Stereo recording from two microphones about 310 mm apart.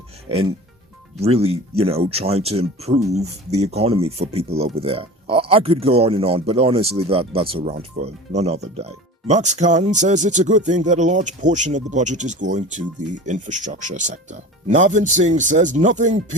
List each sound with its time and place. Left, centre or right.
0.3 s speech: centre